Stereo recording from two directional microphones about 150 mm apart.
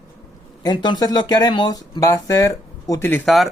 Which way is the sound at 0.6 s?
30° left (ahead or behind).